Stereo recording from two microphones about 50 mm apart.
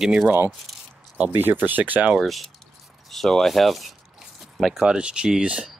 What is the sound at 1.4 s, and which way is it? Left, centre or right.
Speech, right.